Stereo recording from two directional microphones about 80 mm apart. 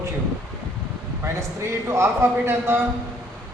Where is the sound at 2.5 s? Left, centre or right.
Right.